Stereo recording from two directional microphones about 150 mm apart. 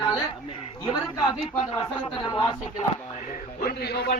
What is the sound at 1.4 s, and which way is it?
Speech, 35° left (ahead or behind).